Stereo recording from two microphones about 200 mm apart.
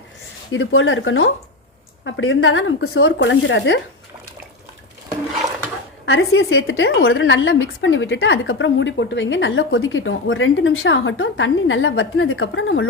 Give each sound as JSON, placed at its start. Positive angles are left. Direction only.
{"t": 0.5, "sound": "a woman's voice", "side_deg": 75}
{"t": 2.0, "sound": "a woman's voice", "side_deg": 65}
{"t": 6.1, "sound": "a woman's voice", "side_deg": 75}